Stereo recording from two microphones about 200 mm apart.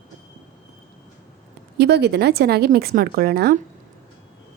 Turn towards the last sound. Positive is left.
turn(degrees=-55)  # may be behind; listen again after turning